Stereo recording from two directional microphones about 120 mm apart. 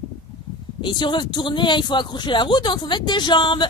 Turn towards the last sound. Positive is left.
turn(degrees=40)  # may be behind; listen again after turning